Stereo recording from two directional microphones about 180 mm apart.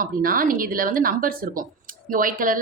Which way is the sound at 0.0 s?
50° right (ahead or behind).